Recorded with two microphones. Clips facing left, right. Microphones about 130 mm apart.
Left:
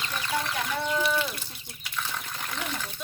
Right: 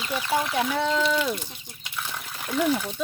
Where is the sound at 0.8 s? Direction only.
90° right.